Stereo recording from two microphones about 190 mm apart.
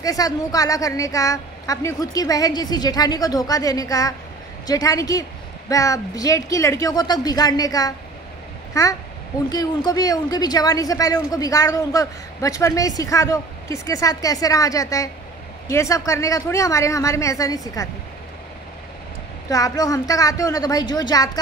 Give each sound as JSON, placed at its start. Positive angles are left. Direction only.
{"t": 0.0, "sound": "a woman's voice", "side_deg": 20}
{"t": 19.5, "sound": "speech", "side_deg": 20}